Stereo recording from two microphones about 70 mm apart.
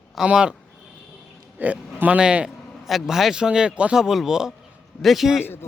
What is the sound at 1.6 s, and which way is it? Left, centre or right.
Speech, right.